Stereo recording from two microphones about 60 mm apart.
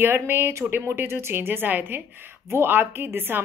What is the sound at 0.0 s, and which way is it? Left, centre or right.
A woman's voice, right.